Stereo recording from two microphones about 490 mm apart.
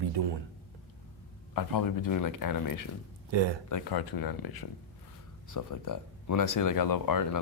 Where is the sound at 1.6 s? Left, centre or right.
Left.